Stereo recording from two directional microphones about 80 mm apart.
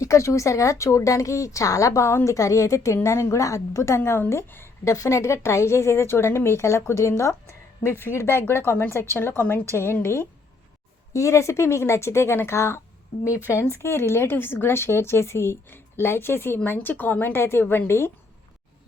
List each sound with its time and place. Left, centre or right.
0.0 s a woman's voice: left